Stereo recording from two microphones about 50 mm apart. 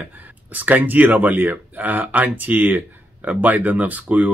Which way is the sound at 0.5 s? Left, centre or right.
Right.